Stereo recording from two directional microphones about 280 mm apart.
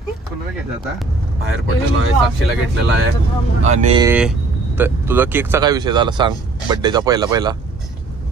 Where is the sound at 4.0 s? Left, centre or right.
Centre.